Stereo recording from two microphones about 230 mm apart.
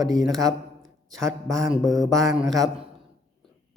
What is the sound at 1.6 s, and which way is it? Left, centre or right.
Speech, centre.